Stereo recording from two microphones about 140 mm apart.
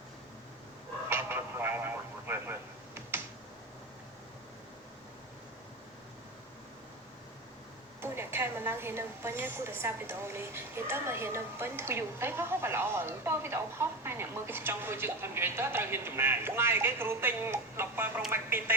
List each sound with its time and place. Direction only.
1.1 s radio: 15° right (ahead or behind)
8.0 s a woman's voice: 15° right (ahead or behind)